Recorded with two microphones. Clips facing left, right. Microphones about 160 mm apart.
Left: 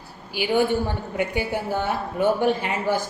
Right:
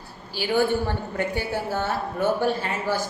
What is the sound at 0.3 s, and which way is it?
A woman's voice, 15° left (ahead or behind).